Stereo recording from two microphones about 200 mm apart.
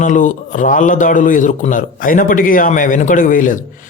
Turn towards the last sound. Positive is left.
turn(degrees=40)  # may be behind; listen again after turning